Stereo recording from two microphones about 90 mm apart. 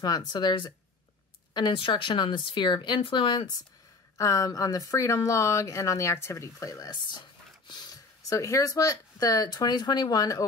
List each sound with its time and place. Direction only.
0.0 s speech: 50° left (ahead or behind)
1.5 s speech: 65° left (ahead or behind); by 3.5 s 50° left (ahead or behind)
4.2 s speech: 40° left (ahead or behind)
6.9 s speech: 55° left (ahead or behind)